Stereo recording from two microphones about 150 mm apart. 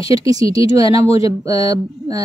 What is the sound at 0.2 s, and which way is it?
Speech, 25° right (ahead or behind).